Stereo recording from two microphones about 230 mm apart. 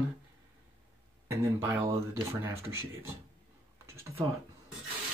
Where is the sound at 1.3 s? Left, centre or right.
Centre.